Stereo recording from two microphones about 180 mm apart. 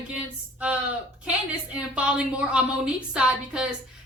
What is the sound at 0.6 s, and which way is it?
A woman's voice, 5° right (ahead or behind).